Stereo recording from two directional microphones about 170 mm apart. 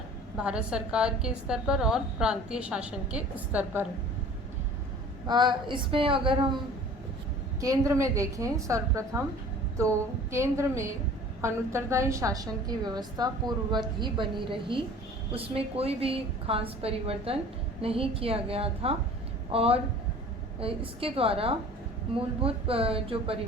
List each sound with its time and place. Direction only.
0.3 s a woman's voice: 5° right (ahead or behind)
5.2 s a woman's voice: 25° right (ahead or behind)
7.6 s a woman's voice: 20° right (ahead or behind)
10.3 s a woman's voice: 15° right (ahead or behind); by 23.4 s 35° right (ahead or behind)